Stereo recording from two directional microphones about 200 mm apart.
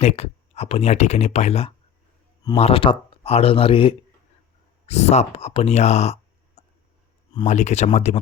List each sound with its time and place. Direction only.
0.0 s speech: 30° left (ahead or behind)
6.6 s a sound: 35° left (ahead or behind)
7.4 s speech: 35° left (ahead or behind)